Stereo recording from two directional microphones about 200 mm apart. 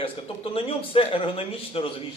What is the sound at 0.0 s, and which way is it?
Speech, 30° left (ahead or behind).